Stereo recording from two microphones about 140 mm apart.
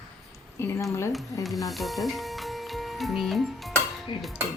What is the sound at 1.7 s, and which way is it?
Speech, centre (ahead or behind).